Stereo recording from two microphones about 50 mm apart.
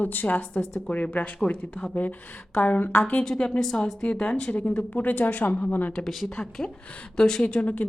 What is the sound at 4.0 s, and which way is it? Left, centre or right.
A woman's voice, left.